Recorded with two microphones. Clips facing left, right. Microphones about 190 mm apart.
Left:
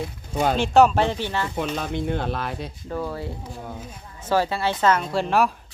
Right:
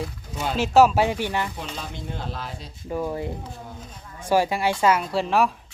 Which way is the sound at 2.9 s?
15° right (ahead or behind).